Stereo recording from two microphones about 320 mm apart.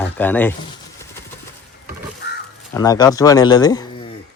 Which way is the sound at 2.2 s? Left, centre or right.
Left.